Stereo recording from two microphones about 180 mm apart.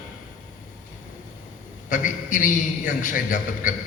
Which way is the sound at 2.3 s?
45° left (ahead or behind).